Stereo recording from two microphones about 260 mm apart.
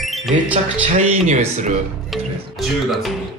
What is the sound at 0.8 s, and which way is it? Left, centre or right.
Speech, right.